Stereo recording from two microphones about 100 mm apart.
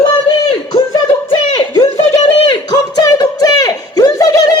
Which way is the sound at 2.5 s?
40° left (ahead or behind).